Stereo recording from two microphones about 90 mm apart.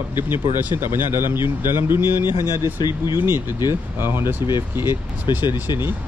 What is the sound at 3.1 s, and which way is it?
Speech, 25° right (ahead or behind).